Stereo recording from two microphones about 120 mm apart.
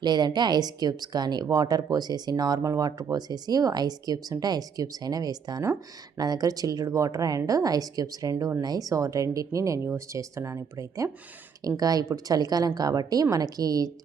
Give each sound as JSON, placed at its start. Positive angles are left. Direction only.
{"t": 0.0, "sound": "a woman's voice", "side_deg": -35}